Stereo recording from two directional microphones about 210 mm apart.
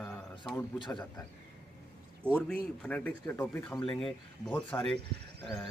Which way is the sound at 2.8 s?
5° left (ahead or behind).